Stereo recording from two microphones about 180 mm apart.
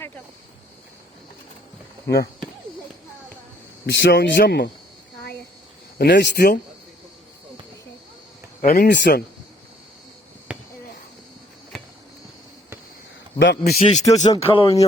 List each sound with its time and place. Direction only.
2.1 s speech: 65° left (ahead or behind)
3.8 s speech: 70° left (ahead or behind)
4.4 s speech: 60° left (ahead or behind)
6.0 s speech: 65° left (ahead or behind)
8.6 s speech: 55° left (ahead or behind); by 9.2 s 70° left (ahead or behind)
10.5 s a sound: 5° right (ahead or behind)
13.4 s speech: 70° left (ahead or behind)
13.7 s speech: 35° left (ahead or behind)